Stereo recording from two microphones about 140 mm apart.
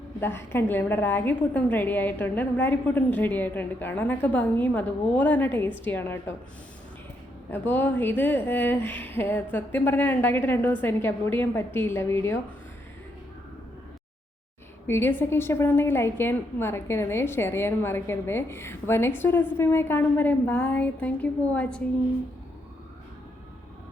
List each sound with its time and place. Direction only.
0.2 s a woman's voice: 15° left (ahead or behind)
7.5 s a woman's voice: 15° left (ahead or behind)
14.8 s a woman's voice: 15° left (ahead or behind)